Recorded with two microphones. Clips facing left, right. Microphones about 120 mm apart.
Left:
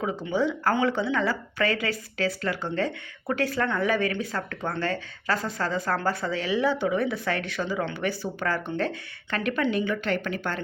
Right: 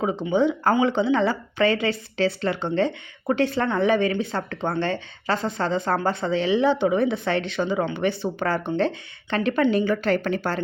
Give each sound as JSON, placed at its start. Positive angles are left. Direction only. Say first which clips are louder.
{"t": 0.0, "sound": "a woman's voice", "louder": "right 5 dB", "side_deg": -20}